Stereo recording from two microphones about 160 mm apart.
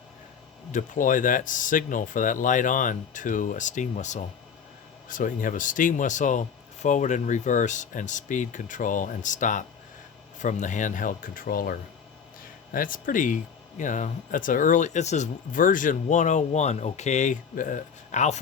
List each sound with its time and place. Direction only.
0.7 s speech: 55° left (ahead or behind)